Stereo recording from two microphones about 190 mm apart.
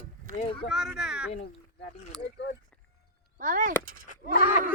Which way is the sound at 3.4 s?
40° right (ahead or behind).